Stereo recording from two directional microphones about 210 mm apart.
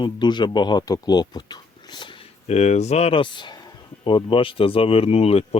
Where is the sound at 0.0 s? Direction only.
20° left (ahead or behind).